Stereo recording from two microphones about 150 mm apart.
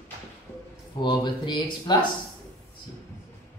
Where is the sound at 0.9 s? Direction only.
30° left (ahead or behind).